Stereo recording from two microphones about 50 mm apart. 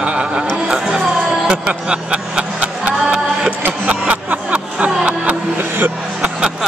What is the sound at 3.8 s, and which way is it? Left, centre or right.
Music, right.